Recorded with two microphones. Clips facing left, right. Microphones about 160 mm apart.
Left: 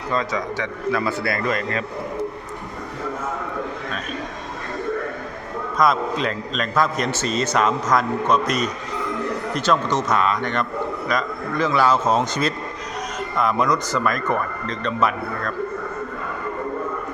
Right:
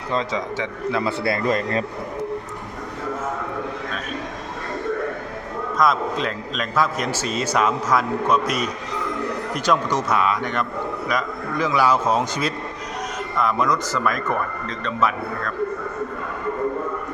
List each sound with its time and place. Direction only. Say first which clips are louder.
0.1 s a man's voice: even; 25° right (ahead or behind)
5.7 s a man's voice: left 1 dB; centre (ahead or behind)